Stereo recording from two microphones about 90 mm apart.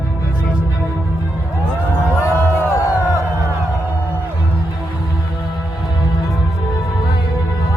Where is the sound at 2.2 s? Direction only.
35° left (ahead or behind).